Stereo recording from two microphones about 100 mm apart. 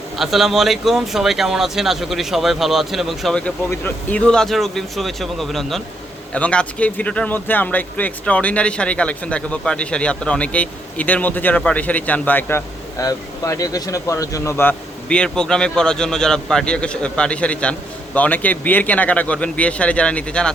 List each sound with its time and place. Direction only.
0.2 s speech: centre (ahead or behind)
3.7 s speech: 20° left (ahead or behind)
4.3 s speech: 5° left (ahead or behind); by 12.6 s 20° left (ahead or behind)
13.0 s a man's voice: 35° left (ahead or behind)
14.5 s speech: 20° left (ahead or behind)
15.1 s speech: 10° left (ahead or behind)